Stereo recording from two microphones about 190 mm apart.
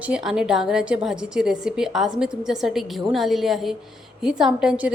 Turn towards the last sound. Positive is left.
turn(degrees=-5)  # may be behind; listen again after turning